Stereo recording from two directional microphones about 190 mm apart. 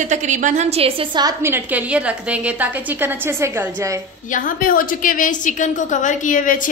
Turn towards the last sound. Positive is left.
turn(degrees=45)  # may be behind; listen again after turning